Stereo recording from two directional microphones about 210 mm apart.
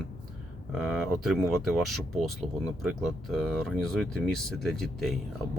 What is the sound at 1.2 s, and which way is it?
Speech, centre (ahead or behind).